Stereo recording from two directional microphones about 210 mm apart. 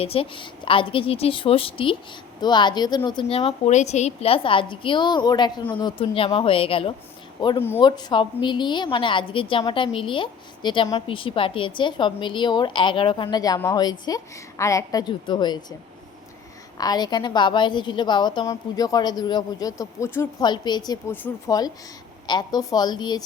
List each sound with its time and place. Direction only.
0.0 s a woman's voice: 25° left (ahead or behind)
16.7 s a woman's voice: 20° left (ahead or behind)